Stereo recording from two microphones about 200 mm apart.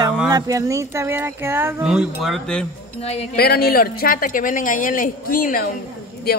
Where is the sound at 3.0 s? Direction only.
30° left (ahead or behind).